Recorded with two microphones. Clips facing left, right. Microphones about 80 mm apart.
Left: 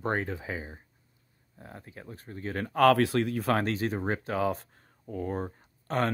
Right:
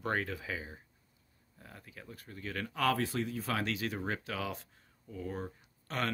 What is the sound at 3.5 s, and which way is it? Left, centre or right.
Speech, left.